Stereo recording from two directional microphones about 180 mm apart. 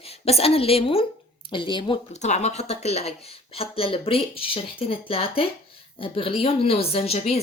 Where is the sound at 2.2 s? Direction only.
40° left (ahead or behind).